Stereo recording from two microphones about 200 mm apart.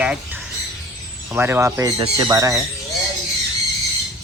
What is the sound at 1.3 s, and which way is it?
Speech, 10° right (ahead or behind).